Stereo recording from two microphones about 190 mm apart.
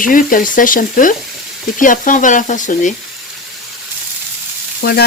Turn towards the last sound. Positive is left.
turn(degrees=55)  # may be behind; listen again after turning